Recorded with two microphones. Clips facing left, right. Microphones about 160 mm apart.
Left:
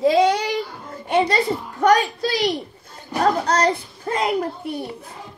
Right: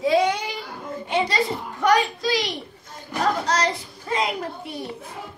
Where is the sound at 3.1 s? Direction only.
35° left (ahead or behind).